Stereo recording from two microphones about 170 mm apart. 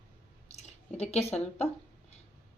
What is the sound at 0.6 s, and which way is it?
Speech, 40° left (ahead or behind).